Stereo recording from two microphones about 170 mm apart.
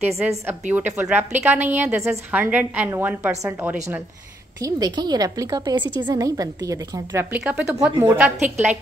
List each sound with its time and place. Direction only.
0.0 s a woman's voice: 15° right (ahead or behind)